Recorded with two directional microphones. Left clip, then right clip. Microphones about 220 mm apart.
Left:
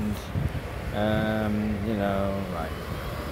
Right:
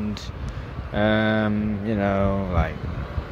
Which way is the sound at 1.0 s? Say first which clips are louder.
Right 6 dB; 15° right (ahead or behind).